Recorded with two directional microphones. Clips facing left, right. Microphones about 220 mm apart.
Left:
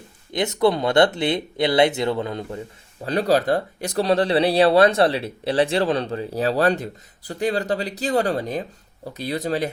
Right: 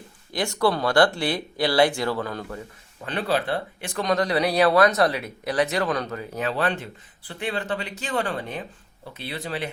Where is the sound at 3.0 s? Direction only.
40° left (ahead or behind).